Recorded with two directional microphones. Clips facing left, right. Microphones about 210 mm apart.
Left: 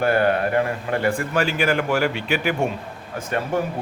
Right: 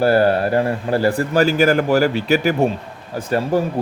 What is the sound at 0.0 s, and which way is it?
A man's voice, 35° right (ahead or behind).